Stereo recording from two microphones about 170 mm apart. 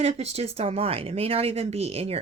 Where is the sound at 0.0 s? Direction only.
40° right (ahead or behind).